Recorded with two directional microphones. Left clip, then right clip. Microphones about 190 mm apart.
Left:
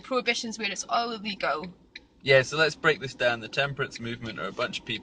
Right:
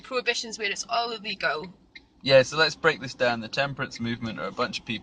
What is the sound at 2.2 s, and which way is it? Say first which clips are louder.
A man's voice: right 2 dB; 20° right (ahead or behind).